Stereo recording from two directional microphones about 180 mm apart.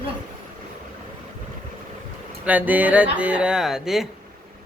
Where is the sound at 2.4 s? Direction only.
10° right (ahead or behind).